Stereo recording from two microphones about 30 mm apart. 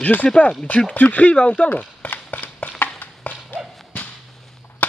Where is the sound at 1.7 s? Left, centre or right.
Left.